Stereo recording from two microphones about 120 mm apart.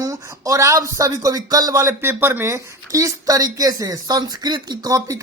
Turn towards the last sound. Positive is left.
turn(degrees=-30)  # may be behind; listen again after turning